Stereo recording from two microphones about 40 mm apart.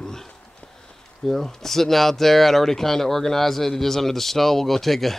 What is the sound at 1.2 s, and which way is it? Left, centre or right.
Speech, centre.